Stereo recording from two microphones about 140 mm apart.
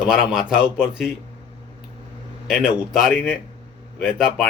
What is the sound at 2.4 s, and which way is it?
Speech, 5° right (ahead or behind).